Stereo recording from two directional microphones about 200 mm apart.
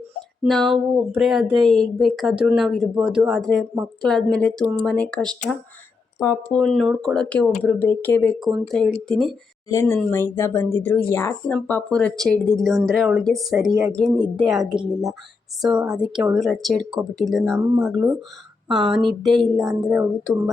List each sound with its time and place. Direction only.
0.4 s speech: centre (ahead or behind)
6.1 s speech: 15° left (ahead or behind)
6.7 s speech: centre (ahead or behind)
17.5 s speech: 10° right (ahead or behind)